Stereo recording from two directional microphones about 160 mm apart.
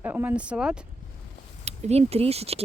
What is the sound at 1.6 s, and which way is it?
Speech, 40° right (ahead or behind).